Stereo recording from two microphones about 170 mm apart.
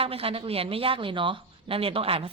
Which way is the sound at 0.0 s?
35° right (ahead or behind).